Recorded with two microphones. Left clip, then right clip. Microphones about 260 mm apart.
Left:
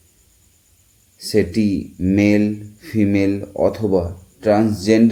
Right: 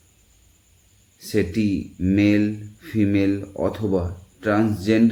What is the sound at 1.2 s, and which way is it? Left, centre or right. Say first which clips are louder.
Speech: left 5 dB; centre.